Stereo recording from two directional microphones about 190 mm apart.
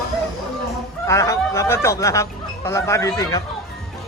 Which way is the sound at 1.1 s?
15° left (ahead or behind).